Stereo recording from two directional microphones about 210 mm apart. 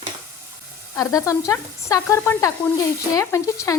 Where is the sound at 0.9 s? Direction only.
15° left (ahead or behind).